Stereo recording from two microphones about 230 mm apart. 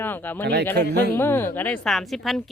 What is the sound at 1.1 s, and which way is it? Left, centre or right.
A woman's voice, centre.